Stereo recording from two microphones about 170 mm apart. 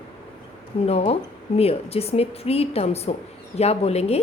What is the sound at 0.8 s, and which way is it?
A woman's voice, 35° left (ahead or behind).